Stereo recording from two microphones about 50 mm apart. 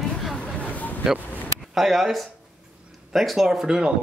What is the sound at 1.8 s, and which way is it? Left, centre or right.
A woman's voice, centre.